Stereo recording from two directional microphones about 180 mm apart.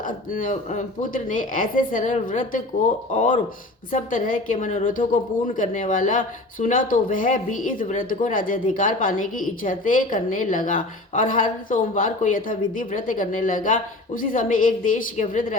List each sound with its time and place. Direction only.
0.0 s a woman's voice: 50° left (ahead or behind)